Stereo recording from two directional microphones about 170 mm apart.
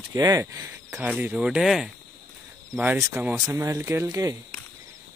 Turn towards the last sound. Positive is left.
turn(degrees=-15)  # may be behind; listen again after turning